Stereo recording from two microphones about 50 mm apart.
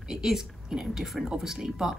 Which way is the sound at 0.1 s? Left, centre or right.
Centre.